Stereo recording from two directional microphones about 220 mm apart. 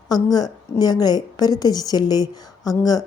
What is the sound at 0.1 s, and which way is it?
A woman's voice, 15° left (ahead or behind).